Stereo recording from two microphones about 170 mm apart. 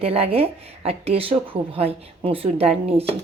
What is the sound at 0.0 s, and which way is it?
Speech, 35° right (ahead or behind).